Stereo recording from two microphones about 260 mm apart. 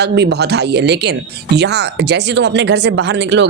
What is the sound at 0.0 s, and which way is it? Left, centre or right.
Speech, right.